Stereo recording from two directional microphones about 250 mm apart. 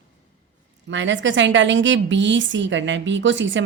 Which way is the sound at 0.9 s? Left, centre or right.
Right.